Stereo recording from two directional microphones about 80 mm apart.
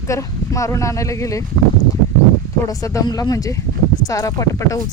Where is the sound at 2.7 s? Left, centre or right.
Left.